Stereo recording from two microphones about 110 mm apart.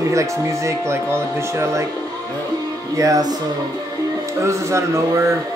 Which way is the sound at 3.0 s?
30° right (ahead or behind).